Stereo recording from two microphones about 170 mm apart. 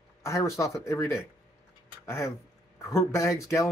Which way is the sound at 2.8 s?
15° left (ahead or behind).